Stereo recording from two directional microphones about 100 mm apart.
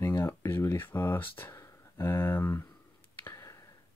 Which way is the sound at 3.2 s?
30° left (ahead or behind).